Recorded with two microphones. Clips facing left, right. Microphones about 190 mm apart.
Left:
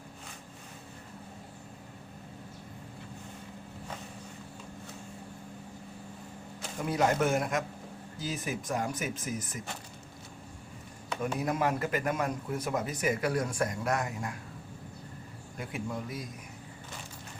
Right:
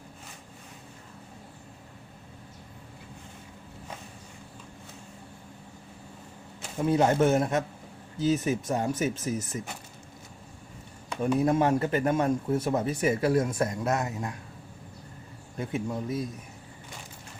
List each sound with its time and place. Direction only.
6.8 s speech: 25° right (ahead or behind)
11.2 s speech: 30° right (ahead or behind)
15.5 s speech: 25° right (ahead or behind)